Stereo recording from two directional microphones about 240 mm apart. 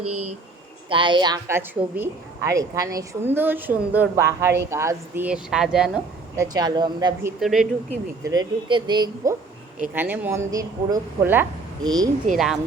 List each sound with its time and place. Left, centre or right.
0.0 s speech: right
0.9 s a woman's voice: centre
8.2 s a woman's voice: centre